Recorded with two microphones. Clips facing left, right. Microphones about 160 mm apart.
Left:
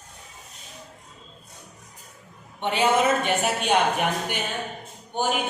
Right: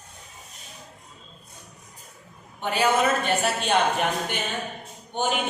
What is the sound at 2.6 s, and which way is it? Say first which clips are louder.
A woman's voice: left 1 dB; 25° left (ahead or behind).